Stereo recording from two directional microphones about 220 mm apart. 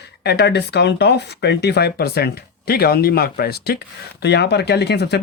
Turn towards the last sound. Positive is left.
turn(degrees=50)  # may be behind; listen again after turning